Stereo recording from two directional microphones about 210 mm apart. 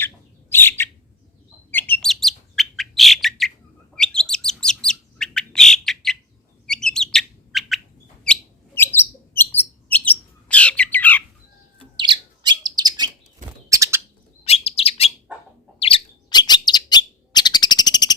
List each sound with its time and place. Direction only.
0.5 s bird: 10° left (ahead or behind)
11.9 s bird: 20° right (ahead or behind)
14.4 s chirp: 30° left (ahead or behind)
15.8 s bird: 25° left (ahead or behind)